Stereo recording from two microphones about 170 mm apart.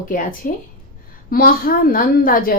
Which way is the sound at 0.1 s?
50° left (ahead or behind).